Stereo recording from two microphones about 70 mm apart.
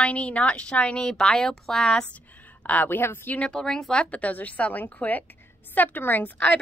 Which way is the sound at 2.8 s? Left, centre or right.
Left.